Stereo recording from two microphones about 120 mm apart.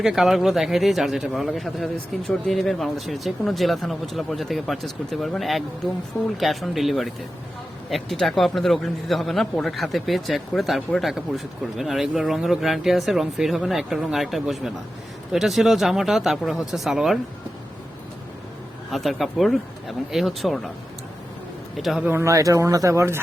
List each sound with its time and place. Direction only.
0.0 s speech: 5° right (ahead or behind)
18.9 s speech: centre (ahead or behind)
21.8 s speech: centre (ahead or behind)
22.0 s speech: 20° right (ahead or behind)